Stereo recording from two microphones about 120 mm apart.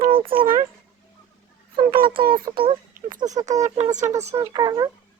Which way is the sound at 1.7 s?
45° right (ahead or behind).